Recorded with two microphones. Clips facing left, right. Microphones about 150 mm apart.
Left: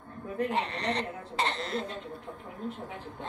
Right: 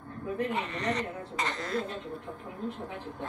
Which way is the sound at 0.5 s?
30° left (ahead or behind).